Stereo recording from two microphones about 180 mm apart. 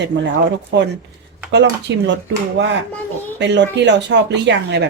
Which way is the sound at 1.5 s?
75° right (ahead or behind).